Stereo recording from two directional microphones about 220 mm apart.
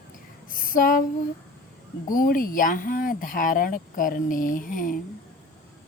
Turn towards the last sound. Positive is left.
turn(degrees=35)  # may be behind; listen again after turning